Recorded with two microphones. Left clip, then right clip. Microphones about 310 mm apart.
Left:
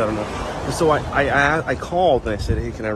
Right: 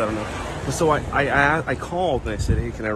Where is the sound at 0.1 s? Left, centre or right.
Left.